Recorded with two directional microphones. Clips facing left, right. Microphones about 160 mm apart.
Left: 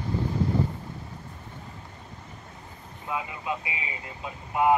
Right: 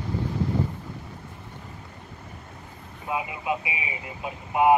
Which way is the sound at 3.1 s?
20° right (ahead or behind).